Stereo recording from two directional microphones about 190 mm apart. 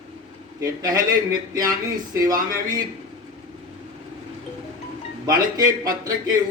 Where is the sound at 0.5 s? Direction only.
20° right (ahead or behind).